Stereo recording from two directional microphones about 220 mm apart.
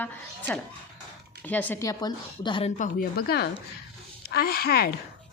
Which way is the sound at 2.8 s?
45° left (ahead or behind).